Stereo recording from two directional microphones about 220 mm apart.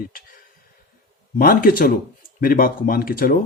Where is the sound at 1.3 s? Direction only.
40° left (ahead or behind).